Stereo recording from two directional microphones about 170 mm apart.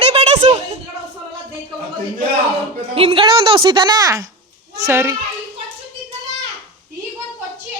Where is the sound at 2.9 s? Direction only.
30° right (ahead or behind); by 5.1 s 15° right (ahead or behind).